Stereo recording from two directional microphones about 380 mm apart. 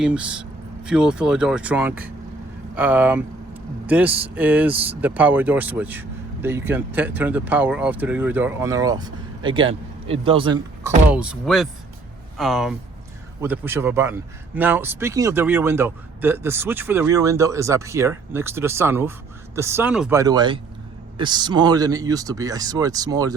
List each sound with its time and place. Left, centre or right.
0.0 s speech: centre